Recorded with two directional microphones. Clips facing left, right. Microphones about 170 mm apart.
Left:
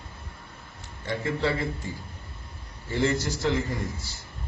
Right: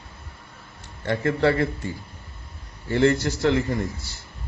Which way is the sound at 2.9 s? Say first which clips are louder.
Right 6 dB; 65° right (ahead or behind).